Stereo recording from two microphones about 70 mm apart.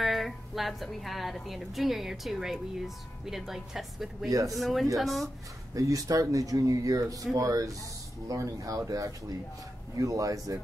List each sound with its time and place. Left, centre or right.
0.0 s a woman's voice: centre
4.3 s speech: right
4.6 s a woman's voice: centre
5.8 s speech: right